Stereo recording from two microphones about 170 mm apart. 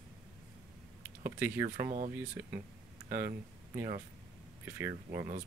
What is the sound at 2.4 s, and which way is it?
Speech, 15° right (ahead or behind).